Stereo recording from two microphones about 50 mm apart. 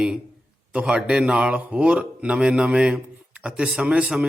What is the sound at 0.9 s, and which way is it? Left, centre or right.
Speech, centre.